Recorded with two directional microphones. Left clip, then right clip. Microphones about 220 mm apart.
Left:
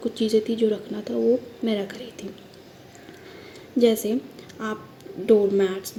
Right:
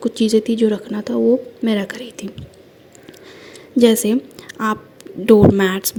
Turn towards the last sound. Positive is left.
turn(degrees=-40)  # may be behind; listen again after turning